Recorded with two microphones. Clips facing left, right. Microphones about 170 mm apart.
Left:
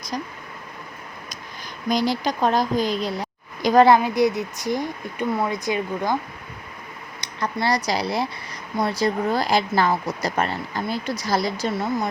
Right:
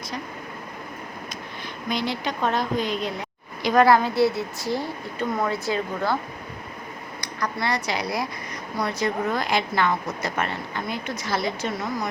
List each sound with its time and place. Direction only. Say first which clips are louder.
1.9 s speech: left 5 dB; 40° left (ahead or behind)
3.8 s a woman's voice: left 2 dB; 15° left (ahead or behind)
7.2 s speech: left 3 dB; 25° left (ahead or behind)